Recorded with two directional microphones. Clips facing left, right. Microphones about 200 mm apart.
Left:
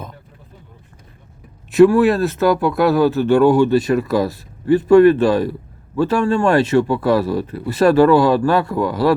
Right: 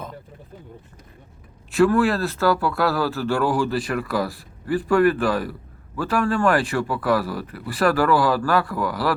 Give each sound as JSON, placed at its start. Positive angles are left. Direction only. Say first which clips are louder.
{"t": 1.7, "sound": "a man's voice", "louder": "left 7 dB", "side_deg": 20}